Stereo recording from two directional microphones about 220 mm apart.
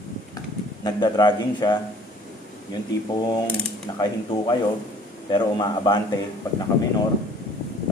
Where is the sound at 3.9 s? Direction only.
20° left (ahead or behind).